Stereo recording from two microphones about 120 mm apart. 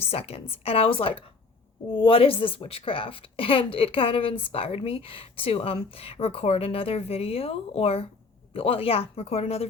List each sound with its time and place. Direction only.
0.0 s a woman's voice: 55° left (ahead or behind)